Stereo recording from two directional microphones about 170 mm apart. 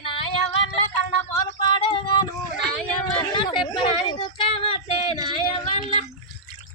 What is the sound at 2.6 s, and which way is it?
Speech, centre (ahead or behind).